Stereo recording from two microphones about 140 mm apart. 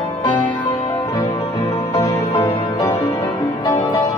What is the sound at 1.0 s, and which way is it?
Music, 30° left (ahead or behind).